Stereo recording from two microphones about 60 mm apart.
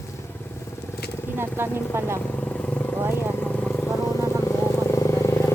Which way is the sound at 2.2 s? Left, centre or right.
Left.